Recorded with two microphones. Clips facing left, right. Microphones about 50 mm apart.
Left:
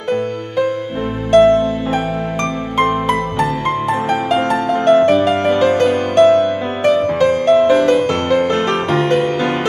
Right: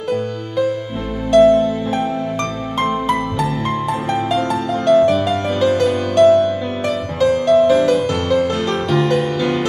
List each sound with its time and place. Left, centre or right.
1.3 s music: left
2.8 s music: left